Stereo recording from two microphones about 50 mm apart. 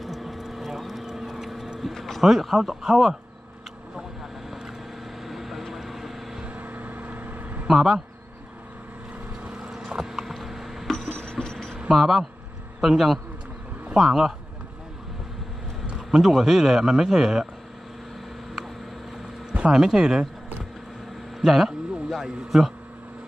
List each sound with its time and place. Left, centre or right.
0.0 s vehicle: centre
1.8 s speech: centre
2.2 s a man's voice: centre
3.9 s vehicle: centre
6.4 s vehicle: right
7.7 s a man's voice: centre
9.6 s a sound: centre
10.9 s a sound: centre
11.9 s a man's voice: centre
16.1 s a man's voice: centre
19.7 s speech: centre
21.4 s a sound: centre
22.4 s a man's voice: centre